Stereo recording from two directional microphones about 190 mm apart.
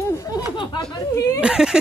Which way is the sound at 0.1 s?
15° left (ahead or behind).